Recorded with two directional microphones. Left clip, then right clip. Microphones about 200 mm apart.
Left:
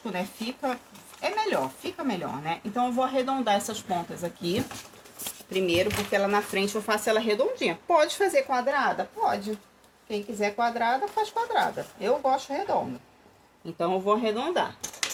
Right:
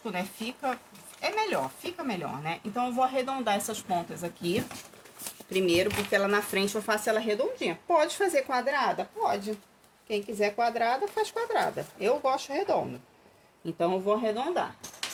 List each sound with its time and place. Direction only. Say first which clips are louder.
0.0 s speech: left 1 dB; 15° right (ahead or behind)
5.5 s speech: left 1 dB; 35° right (ahead or behind); by 8.4 s 15° right (ahead or behind)
8.4 s speech: left 2 dB; 30° right (ahead or behind)
10.1 s speech: even; 40° right (ahead or behind)
13.7 s speech: left 2 dB; 20° right (ahead or behind)
14.2 s speech: left 2 dB; centre (ahead or behind)